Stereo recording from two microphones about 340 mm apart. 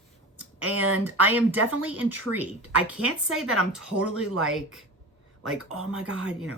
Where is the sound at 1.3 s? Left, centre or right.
Centre.